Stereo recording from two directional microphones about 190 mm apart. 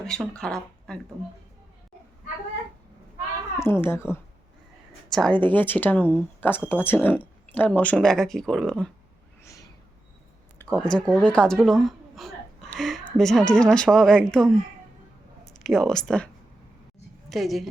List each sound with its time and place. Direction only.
0.0 s speech: 5° left (ahead or behind)
3.6 s speech: 10° left (ahead or behind)
9.4 s a sound: 15° left (ahead or behind)
10.9 s speech: 5° left (ahead or behind)
15.6 s a woman's voice: centre (ahead or behind)